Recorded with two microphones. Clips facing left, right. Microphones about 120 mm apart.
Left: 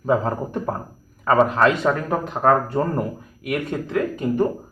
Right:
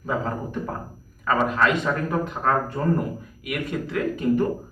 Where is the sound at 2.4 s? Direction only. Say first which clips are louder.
Left 8 dB; 50° left (ahead or behind); by 4.0 s 35° left (ahead or behind).